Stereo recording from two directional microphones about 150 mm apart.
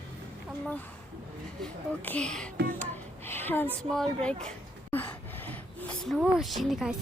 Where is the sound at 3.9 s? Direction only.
5° left (ahead or behind).